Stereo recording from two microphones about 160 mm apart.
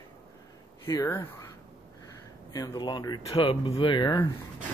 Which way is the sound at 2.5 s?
25° left (ahead or behind).